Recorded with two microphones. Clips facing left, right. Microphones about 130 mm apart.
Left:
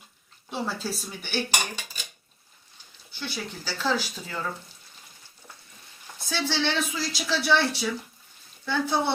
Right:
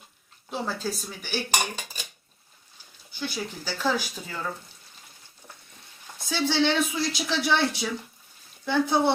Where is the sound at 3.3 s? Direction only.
15° right (ahead or behind).